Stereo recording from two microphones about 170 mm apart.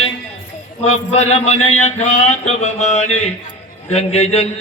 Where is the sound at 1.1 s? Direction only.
40° left (ahead or behind).